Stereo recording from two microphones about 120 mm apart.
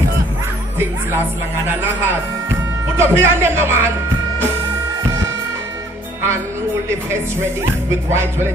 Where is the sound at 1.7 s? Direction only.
15° right (ahead or behind).